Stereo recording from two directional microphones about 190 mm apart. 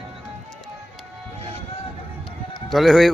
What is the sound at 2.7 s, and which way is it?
Speech, centre (ahead or behind).